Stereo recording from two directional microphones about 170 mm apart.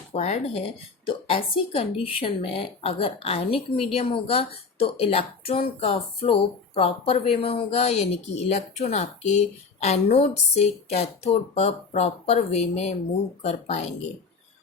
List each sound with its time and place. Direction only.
0.1 s a woman's voice: 40° left (ahead or behind)